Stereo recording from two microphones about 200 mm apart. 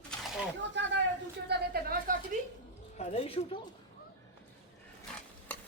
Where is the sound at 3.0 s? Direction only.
30° left (ahead or behind).